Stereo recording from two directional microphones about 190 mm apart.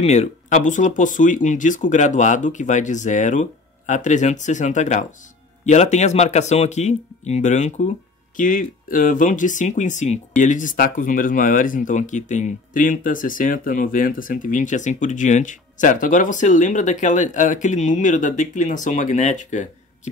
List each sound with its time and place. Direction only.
0.0 s speech: 35° left (ahead or behind)